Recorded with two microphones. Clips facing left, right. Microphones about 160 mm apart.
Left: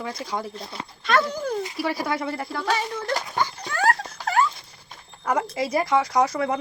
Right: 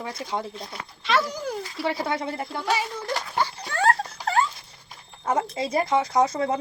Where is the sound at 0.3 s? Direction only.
25° right (ahead or behind).